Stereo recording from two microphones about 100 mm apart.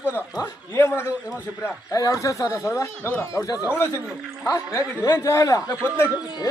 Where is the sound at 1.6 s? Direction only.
35° left (ahead or behind).